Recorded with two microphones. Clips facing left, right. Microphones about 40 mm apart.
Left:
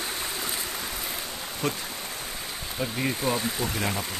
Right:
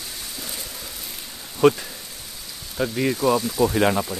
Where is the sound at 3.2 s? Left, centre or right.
Left.